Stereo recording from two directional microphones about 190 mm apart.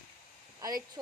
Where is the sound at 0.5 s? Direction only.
20° right (ahead or behind).